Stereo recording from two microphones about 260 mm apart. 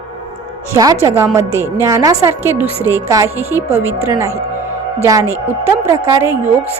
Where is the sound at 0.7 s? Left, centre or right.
Centre.